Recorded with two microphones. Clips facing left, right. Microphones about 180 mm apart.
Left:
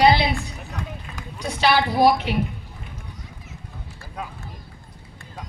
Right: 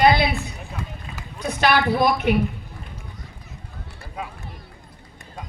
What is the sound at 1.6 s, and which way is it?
Speech, 55° right (ahead or behind).